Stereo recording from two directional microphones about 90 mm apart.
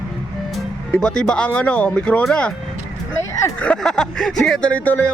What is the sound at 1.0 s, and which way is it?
Speech, 10° left (ahead or behind).